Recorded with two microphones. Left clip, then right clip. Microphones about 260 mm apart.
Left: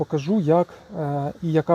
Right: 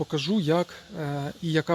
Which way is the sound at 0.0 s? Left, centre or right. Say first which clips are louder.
Left 4 dB; centre.